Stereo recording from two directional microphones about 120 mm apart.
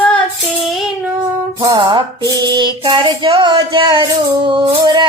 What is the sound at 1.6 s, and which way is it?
Music, 35° right (ahead or behind).